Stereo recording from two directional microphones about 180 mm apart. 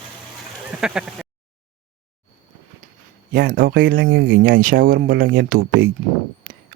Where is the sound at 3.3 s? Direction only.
50° right (ahead or behind).